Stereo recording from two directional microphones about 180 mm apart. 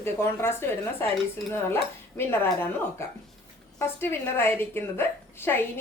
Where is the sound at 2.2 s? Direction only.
10° left (ahead or behind).